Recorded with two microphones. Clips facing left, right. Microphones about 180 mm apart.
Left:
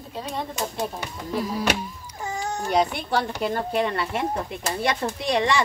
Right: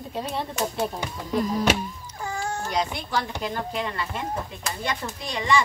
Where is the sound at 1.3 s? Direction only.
5° left (ahead or behind).